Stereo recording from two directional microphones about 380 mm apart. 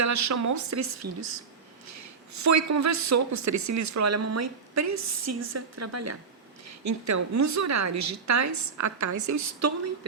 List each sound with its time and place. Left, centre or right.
0.0 s a woman's voice: right